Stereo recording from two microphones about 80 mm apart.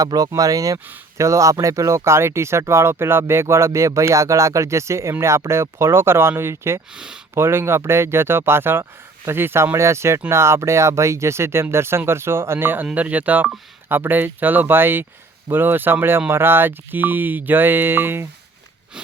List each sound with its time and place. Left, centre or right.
0.0 s speech: right
6.9 s speech: centre
7.3 s speech: right